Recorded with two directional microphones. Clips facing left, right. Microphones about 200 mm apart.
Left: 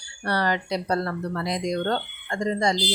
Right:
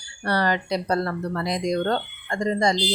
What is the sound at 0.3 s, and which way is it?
Speech, 45° right (ahead or behind).